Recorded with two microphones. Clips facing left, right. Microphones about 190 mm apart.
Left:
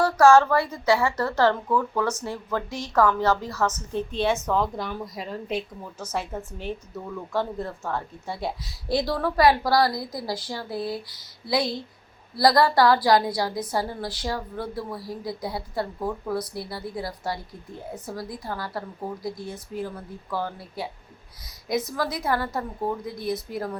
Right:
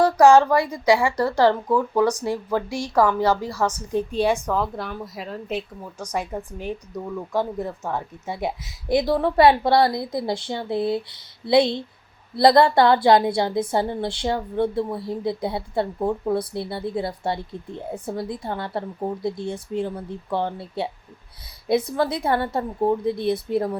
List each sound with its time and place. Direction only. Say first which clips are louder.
0.0 s a woman's voice: right 2 dB; 15° right (ahead or behind)